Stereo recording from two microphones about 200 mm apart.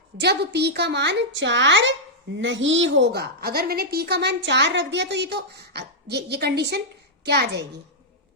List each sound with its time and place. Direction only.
0.2 s a woman's voice: 55° right (ahead or behind)